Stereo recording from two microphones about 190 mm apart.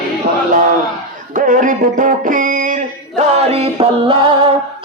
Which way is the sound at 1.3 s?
45° right (ahead or behind).